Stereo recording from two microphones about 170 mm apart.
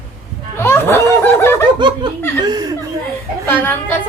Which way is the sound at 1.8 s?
25° right (ahead or behind).